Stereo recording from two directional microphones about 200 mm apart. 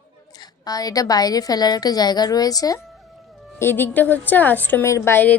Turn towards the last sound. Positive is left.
turn(degrees=10)  # may be behind; listen again after turning